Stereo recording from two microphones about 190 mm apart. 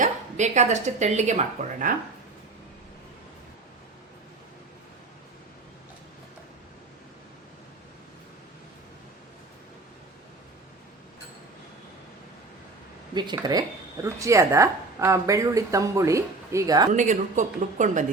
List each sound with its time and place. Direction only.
0.0 s speech: 40° right (ahead or behind)
13.1 s speech: 20° right (ahead or behind)
16.9 s speech: 40° right (ahead or behind)